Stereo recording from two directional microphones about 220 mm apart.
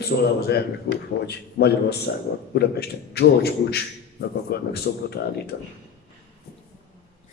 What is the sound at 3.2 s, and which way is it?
A man's voice, 45° left (ahead or behind).